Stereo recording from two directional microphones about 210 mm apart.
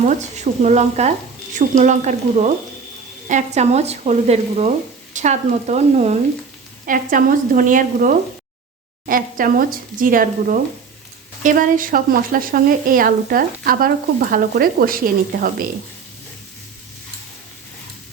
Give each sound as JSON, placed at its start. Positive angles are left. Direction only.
{"t": 0.0, "sound": "speech", "side_deg": -35}